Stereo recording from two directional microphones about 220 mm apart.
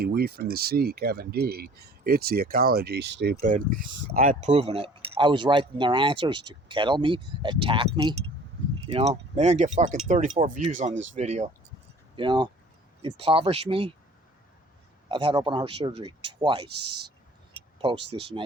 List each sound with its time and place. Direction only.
0.0 s speech: 45° right (ahead or behind)
4.2 s speech: 35° right (ahead or behind)
12.1 s speech: 20° right (ahead or behind)
15.1 s speech: 20° right (ahead or behind)
17.7 s speech: 25° right (ahead or behind)